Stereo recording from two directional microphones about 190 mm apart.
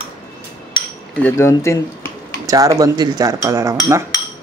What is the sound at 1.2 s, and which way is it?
Speech, 15° left (ahead or behind).